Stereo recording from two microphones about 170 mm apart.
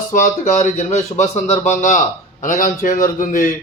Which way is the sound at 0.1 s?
50° left (ahead or behind).